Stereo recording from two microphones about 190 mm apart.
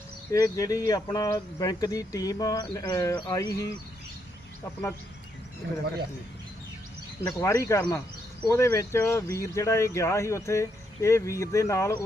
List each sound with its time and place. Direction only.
0.3 s speech: 15° left (ahead or behind)
7.3 s speech: 15° left (ahead or behind)